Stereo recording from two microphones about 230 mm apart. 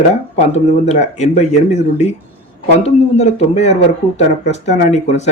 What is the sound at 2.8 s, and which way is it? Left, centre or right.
A man's voice, left.